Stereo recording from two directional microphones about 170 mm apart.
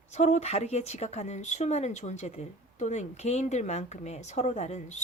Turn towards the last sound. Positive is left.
turn(degrees=40)  # may be behind; listen again after turning